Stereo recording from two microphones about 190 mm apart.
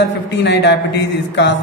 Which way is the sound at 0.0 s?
65° left (ahead or behind).